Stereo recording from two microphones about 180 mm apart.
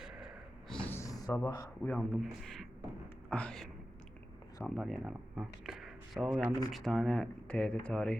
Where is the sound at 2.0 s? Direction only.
Centre (ahead or behind).